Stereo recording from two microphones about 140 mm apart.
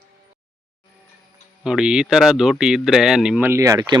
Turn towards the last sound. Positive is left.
turn(degrees=-25)  # may be behind; listen again after turning